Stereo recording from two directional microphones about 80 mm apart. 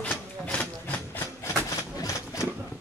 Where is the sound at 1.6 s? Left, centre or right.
Left.